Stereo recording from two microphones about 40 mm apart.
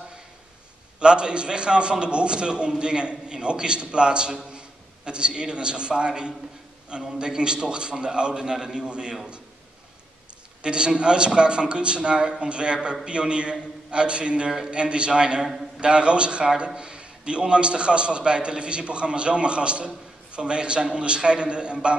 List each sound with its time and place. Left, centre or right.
0.9 s a man's voice: right
10.6 s a man's voice: right